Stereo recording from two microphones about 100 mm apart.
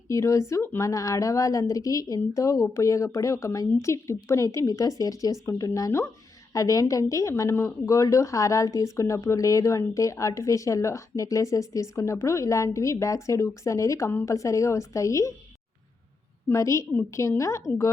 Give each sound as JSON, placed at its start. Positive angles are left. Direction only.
{"t": 0.1, "sound": "a woman's voice", "side_deg": 30}
{"t": 14.1, "sound": "a woman's voice", "side_deg": 20}
{"t": 14.3, "sound": "a woman's voice", "side_deg": 35}
{"t": 16.5, "sound": "a woman's voice", "side_deg": 30}